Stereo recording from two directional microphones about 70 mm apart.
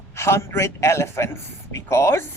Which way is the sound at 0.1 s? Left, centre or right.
Left.